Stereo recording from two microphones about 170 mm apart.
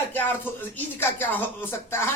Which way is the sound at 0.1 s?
10° left (ahead or behind).